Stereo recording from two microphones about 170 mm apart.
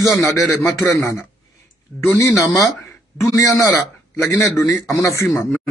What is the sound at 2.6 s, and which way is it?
A man's voice, 20° left (ahead or behind).